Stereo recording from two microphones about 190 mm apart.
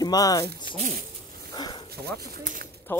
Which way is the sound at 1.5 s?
20° left (ahead or behind).